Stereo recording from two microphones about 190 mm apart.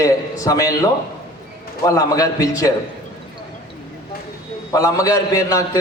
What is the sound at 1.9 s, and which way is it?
Speech, 20° left (ahead or behind).